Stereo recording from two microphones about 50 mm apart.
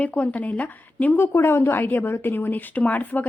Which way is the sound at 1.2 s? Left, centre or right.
Left.